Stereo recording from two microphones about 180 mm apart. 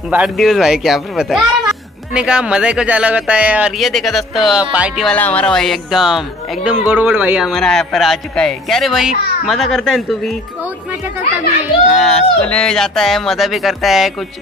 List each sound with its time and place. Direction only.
0.1 s speech: 5° right (ahead or behind)
5.1 s speech: 10° left (ahead or behind)
11.9 s speech: 5° left (ahead or behind)